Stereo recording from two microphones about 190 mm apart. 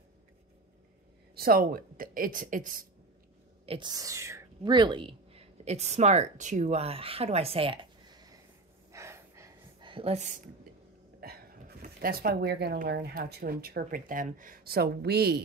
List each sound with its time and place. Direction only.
1.3 s speech: 50° right (ahead or behind)
3.6 s speech: 25° right (ahead or behind)
8.9 s a sound: 15° right (ahead or behind)
9.8 s speech: 30° right (ahead or behind)
11.1 s a sound: 50° right (ahead or behind)
13.1 s speech: 55° right (ahead or behind)